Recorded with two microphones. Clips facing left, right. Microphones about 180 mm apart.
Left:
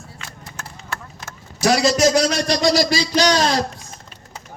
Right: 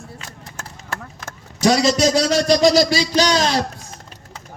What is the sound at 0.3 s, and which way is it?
Clip-clop, 45° right (ahead or behind).